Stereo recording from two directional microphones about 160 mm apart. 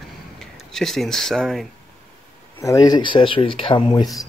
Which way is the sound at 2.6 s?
25° left (ahead or behind).